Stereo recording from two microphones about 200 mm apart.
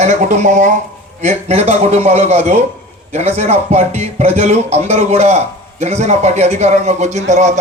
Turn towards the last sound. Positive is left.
turn(degrees=-35)  # may be behind; listen again after turning